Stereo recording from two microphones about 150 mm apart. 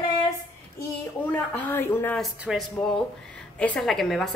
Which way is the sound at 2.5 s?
5° right (ahead or behind).